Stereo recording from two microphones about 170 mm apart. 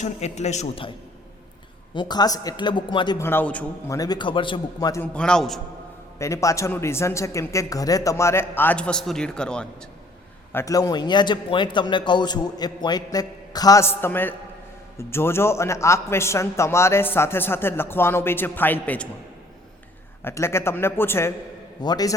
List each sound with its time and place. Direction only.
0.0 s a man's voice: 40° left (ahead or behind)
2.0 s a man's voice: 25° left (ahead or behind)
3.2 s a man's voice: 15° left (ahead or behind)
3.9 s a man's voice: 20° left (ahead or behind)
5.1 s a man's voice: 5° left (ahead or behind)
6.1 s a man's voice: 15° left (ahead or behind)
10.5 s a man's voice: 15° left (ahead or behind)
20.2 s a man's voice: 15° left (ahead or behind)